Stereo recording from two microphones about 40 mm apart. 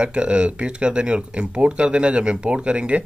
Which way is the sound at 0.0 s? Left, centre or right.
Right.